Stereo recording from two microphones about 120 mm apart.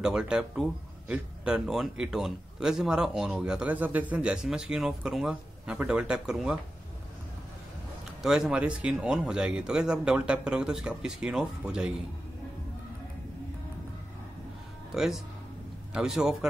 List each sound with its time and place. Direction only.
0.0 s speech: 5° right (ahead or behind)
8.2 s speech: 5° right (ahead or behind)
15.0 s a man's voice: 5° right (ahead or behind)